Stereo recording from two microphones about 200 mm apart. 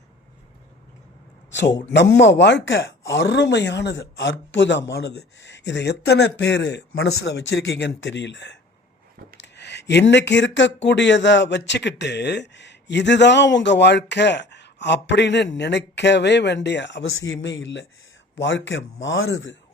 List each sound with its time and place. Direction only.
1.5 s speech: 65° left (ahead or behind)